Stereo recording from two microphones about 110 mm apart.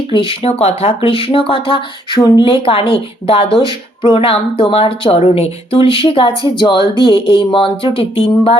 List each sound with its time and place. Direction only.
0.1 s a woman's voice: 60° left (ahead or behind)